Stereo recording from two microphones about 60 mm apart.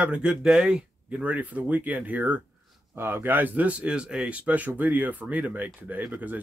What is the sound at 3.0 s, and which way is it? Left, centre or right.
Speech, right.